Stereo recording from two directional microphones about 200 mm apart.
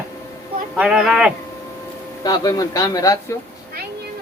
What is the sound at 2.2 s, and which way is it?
Speech, 20° left (ahead or behind).